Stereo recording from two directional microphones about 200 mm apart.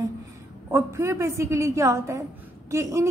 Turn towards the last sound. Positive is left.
turn(degrees=-15)  # may be behind; listen again after turning